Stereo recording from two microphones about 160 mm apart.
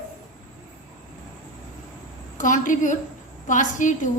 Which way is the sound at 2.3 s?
55° left (ahead or behind).